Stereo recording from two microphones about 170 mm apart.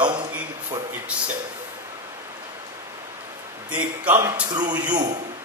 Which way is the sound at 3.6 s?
10° right (ahead or behind).